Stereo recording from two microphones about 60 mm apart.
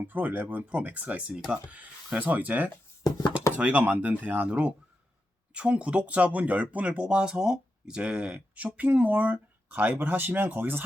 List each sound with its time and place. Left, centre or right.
0.0 s speech: right
7.1 s speech: centre; by 10.8 s right